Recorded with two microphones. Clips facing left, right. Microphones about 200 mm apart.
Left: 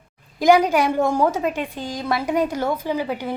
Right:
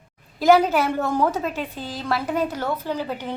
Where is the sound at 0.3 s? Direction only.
15° left (ahead or behind).